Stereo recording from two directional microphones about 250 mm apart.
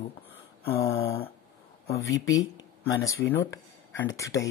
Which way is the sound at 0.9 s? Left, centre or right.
Left.